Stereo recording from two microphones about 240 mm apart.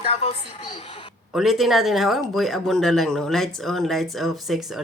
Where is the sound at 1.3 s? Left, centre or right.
Centre.